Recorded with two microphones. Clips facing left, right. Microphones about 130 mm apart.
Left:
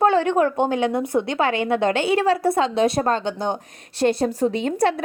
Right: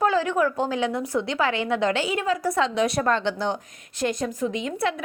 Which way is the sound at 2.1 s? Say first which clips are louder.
Left 6 dB; 80° left.